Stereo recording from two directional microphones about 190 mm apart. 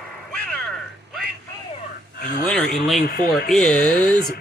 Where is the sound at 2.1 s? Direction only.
50° left (ahead or behind).